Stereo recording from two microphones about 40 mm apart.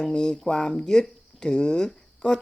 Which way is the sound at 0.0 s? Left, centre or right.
Centre.